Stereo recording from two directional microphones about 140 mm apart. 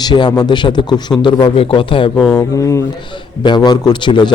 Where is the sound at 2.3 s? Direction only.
20° left (ahead or behind).